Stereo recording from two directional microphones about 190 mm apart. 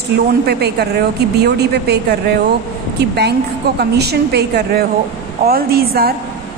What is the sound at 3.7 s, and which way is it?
A woman's voice, 60° right (ahead or behind).